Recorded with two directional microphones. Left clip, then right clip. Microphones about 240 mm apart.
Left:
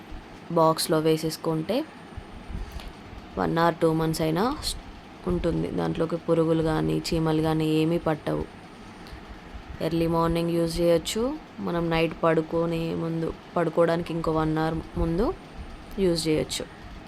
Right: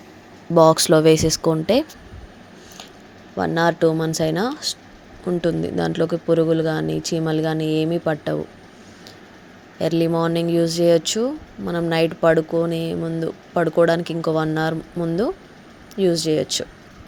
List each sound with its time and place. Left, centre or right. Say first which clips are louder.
0.5 s speech: right 8 dB; right
3.3 s speech: right 4 dB; centre
9.7 s speech: right 5 dB; centre